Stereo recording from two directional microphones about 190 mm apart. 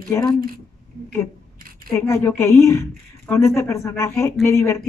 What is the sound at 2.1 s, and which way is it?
A man's voice, 15° left (ahead or behind).